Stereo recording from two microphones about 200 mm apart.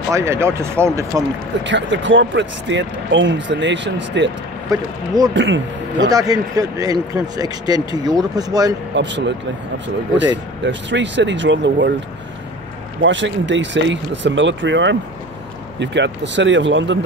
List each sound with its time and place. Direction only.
0.1 s speech: 15° right (ahead or behind)
1.6 s speech: 65° right (ahead or behind)
4.6 s speech: 20° right (ahead or behind)
5.3 s speech: 65° right (ahead or behind)
6.0 s speech: 20° right (ahead or behind)
8.9 s speech: 60° right (ahead or behind)
10.3 s speech: 65° right (ahead or behind)
13.0 s speech: 65° right (ahead or behind)